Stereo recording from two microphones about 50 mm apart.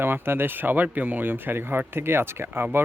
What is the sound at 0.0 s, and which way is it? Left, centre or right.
Speech, right.